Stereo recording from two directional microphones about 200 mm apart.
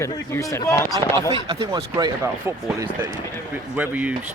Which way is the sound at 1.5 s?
20° right (ahead or behind).